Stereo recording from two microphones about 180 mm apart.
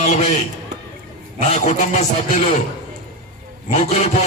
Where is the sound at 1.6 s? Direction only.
40° left (ahead or behind).